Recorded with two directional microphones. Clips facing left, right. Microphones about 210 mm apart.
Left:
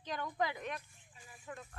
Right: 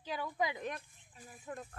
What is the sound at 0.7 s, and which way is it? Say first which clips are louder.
Speech: even; 40° right (ahead or behind).